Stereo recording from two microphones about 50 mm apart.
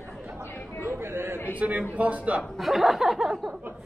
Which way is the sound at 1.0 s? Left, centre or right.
Right.